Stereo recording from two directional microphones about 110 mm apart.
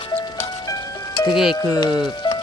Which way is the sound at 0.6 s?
40° left (ahead or behind).